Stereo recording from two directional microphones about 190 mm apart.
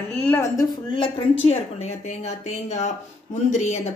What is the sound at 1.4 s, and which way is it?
Speech, 35° left (ahead or behind).